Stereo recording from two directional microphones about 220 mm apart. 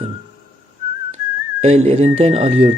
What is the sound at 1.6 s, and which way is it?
Speech, 30° right (ahead or behind).